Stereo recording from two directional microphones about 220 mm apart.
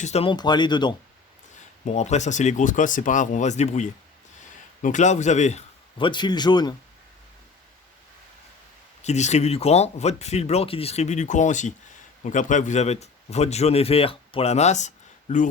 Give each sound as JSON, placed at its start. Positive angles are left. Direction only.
{"t": 0.0, "sound": "speech", "side_deg": 30}
{"t": 1.8, "sound": "speech", "side_deg": 30}
{"t": 9.0, "sound": "a man's voice", "side_deg": 30}